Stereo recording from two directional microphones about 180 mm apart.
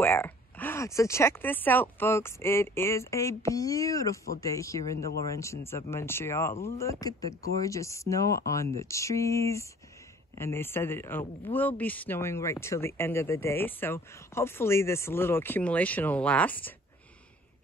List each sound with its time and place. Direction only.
0.0 s speech: 10° left (ahead or behind)
11.5 s speech: 35° left (ahead or behind)
11.8 s speech: 10° left (ahead or behind)